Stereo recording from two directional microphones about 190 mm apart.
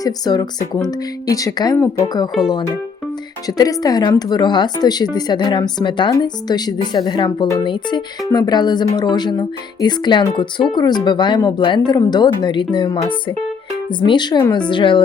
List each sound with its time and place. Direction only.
0.0 s speech: 20° left (ahead or behind)